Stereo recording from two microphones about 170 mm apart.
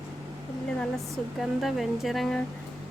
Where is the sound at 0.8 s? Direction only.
Centre (ahead or behind).